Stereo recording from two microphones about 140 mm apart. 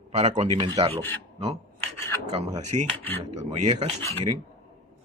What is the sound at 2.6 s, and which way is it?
Speech, 60° right (ahead or behind).